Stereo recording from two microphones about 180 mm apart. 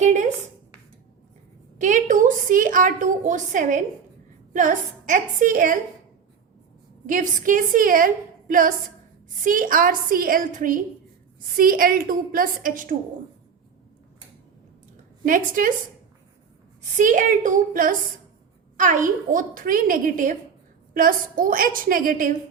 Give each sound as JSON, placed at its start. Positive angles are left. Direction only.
{"t": 0.0, "sound": "a sound", "side_deg": -45}
{"t": 1.8, "sound": "a woman's voice", "side_deg": -45}
{"t": 7.1, "sound": "a woman's voice", "side_deg": -45}
{"t": 15.2, "sound": "a woman's voice", "side_deg": -50}
{"t": 17.0, "sound": "a woman's voice", "side_deg": -45}